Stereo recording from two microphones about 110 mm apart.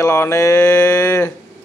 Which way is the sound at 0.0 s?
25° left (ahead or behind).